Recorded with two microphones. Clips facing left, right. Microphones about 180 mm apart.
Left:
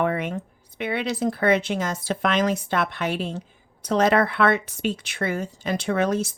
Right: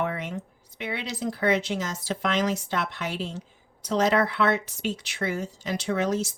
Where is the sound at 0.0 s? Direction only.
60° left (ahead or behind).